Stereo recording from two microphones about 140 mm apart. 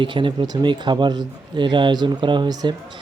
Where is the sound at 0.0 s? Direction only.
35° right (ahead or behind).